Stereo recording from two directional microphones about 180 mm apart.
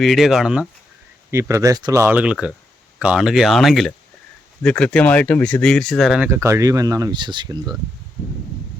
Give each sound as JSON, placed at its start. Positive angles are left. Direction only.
{"t": 0.0, "sound": "speech", "side_deg": 0}
{"t": 1.3, "sound": "speech", "side_deg": -15}